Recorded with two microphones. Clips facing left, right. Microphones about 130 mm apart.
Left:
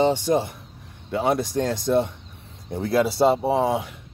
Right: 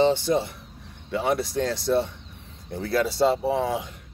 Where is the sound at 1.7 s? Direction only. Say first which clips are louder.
Left 3 dB; 20° left (ahead or behind).